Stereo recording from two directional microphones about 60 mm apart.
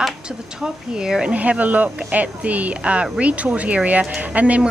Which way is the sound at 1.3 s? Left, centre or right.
Right.